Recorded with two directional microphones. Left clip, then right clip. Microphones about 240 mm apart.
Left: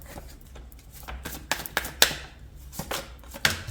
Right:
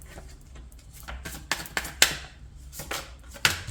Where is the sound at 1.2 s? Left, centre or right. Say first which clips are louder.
Left 1 dB; left.